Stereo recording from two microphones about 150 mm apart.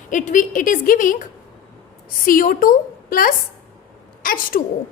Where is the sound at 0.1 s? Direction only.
60° left (ahead or behind).